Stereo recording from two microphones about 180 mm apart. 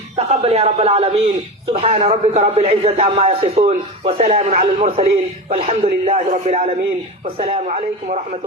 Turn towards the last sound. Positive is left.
turn(degrees=-35)  # may be behind; listen again after turning